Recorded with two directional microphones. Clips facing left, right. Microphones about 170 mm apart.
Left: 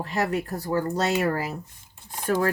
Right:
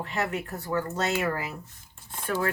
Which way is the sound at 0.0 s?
35° left (ahead or behind).